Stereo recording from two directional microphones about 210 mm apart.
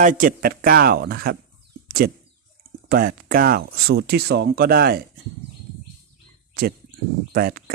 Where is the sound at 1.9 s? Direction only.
45° right (ahead or behind).